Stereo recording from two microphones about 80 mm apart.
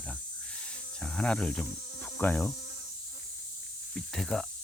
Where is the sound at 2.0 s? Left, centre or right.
Left.